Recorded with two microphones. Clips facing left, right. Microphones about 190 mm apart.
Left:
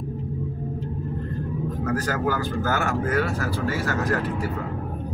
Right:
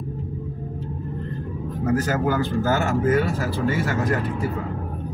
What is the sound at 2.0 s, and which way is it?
A man's voice, 20° right (ahead or behind).